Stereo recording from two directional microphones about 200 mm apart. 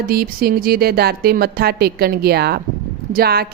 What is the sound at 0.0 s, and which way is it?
Speech, 50° right (ahead or behind).